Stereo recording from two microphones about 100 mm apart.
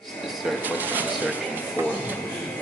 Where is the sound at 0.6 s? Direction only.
15° right (ahead or behind).